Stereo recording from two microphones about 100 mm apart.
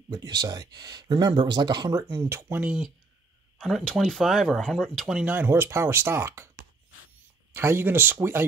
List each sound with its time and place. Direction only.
0.1 s speech: 40° right (ahead or behind)
2.1 s speech: 25° right (ahead or behind)
3.5 s speech: centre (ahead or behind)
5.2 s speech: 20° right (ahead or behind)
7.5 s speech: 20° right (ahead or behind)